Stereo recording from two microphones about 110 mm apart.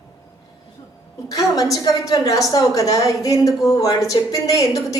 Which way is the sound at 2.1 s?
35° left (ahead or behind).